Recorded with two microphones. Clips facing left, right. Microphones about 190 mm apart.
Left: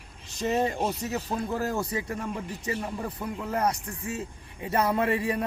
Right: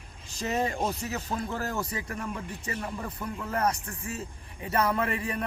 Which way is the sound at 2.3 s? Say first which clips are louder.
Left 4 dB; 15° left (ahead or behind).